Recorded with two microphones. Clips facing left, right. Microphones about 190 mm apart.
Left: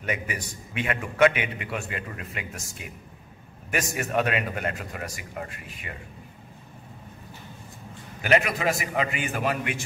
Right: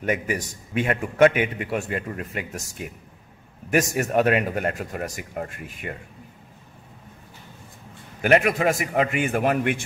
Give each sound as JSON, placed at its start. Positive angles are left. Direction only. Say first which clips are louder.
{"t": 0.0, "sound": "a man's voice", "louder": "right 6 dB", "side_deg": -45}
{"t": 3.7, "sound": "a man's voice", "louder": "right 6 dB", "side_deg": -45}
{"t": 8.2, "sound": "a man's voice", "louder": "right 4 dB", "side_deg": -50}